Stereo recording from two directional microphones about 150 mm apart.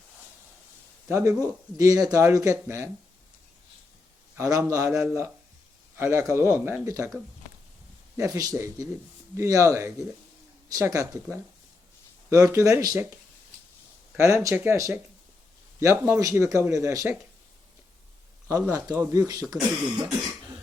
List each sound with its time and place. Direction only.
1.1 s speech: 20° right (ahead or behind)
4.4 s speech: 25° right (ahead or behind)
8.1 s speech: 20° right (ahead or behind)
14.2 s speech: 20° right (ahead or behind)
18.4 s speech: 20° right (ahead or behind)